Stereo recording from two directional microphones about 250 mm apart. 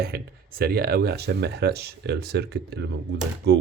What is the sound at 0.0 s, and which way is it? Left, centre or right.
Speech, right.